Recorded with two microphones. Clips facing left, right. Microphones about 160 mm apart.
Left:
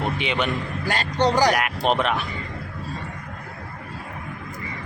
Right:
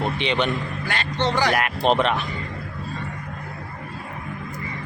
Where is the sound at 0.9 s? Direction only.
40° left (ahead or behind).